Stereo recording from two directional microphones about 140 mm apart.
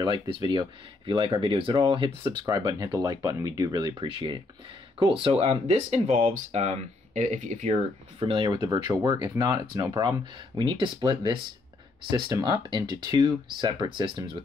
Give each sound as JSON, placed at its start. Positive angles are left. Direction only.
{"t": 0.0, "sound": "speech", "side_deg": -30}
{"t": 2.3, "sound": "speech", "side_deg": -25}
{"t": 4.0, "sound": "speech", "side_deg": -40}
{"t": 8.2, "sound": "speech", "side_deg": -40}
{"t": 8.5, "sound": "speech", "side_deg": -25}